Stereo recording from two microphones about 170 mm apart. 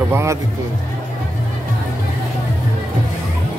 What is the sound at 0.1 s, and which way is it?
Speech, 15° right (ahead or behind).